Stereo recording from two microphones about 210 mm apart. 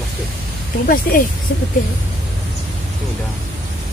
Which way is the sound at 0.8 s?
40° left (ahead or behind).